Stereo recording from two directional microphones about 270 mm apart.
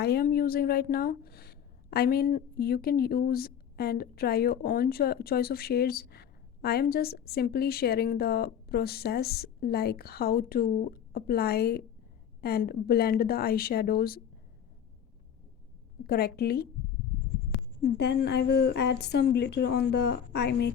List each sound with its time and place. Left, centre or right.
0.0 s a woman's voice: left
16.0 s a woman's voice: left
17.8 s a woman's voice: left